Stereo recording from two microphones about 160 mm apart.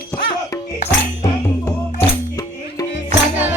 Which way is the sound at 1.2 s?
20° left (ahead or behind).